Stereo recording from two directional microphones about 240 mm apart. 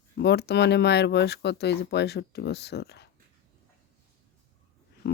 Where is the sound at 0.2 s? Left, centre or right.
Left.